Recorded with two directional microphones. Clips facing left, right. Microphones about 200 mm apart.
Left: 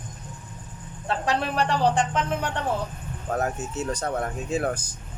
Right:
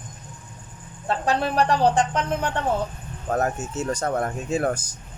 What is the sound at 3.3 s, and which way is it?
Speech, 45° right (ahead or behind).